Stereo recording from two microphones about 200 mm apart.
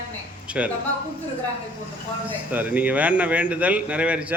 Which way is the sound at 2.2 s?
10° right (ahead or behind).